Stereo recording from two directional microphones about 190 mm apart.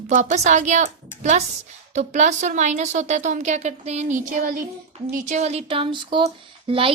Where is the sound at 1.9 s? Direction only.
35° right (ahead or behind).